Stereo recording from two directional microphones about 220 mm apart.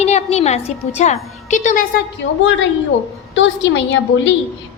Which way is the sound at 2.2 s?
55° left (ahead or behind).